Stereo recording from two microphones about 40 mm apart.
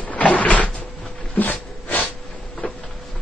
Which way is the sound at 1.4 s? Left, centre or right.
Left.